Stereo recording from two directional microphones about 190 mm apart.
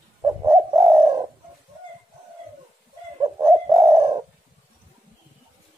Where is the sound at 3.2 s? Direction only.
15° right (ahead or behind).